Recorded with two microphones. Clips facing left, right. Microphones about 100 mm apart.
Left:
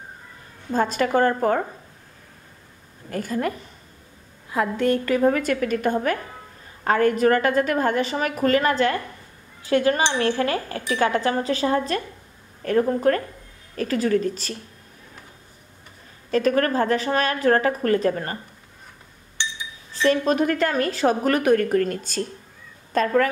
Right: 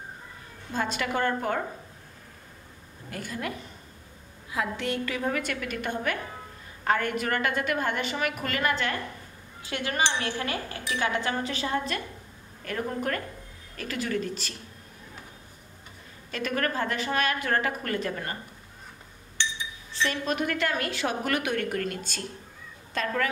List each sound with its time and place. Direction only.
0.7 s a woman's voice: 40° left (ahead or behind)
3.1 s a woman's voice: 40° left (ahead or behind)
16.3 s a woman's voice: 40° left (ahead or behind)
19.9 s a woman's voice: 40° left (ahead or behind)